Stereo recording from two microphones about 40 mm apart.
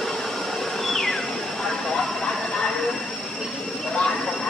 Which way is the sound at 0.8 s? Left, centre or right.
Centre.